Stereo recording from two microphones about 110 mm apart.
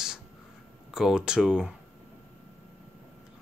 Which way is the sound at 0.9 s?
5° right (ahead or behind).